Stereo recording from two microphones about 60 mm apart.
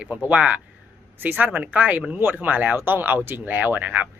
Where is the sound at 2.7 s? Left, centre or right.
Right.